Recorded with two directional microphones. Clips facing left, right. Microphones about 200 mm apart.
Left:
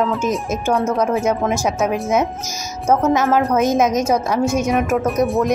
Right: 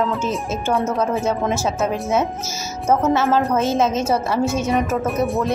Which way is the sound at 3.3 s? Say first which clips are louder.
Left 2 dB; 15° left (ahead or behind).